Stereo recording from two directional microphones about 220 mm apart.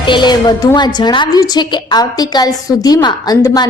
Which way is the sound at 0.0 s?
20° left (ahead or behind).